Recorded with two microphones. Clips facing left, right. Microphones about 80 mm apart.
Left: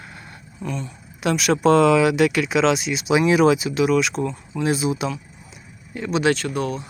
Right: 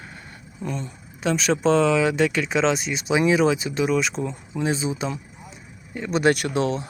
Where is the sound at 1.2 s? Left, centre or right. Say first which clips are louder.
Left 3 dB; centre.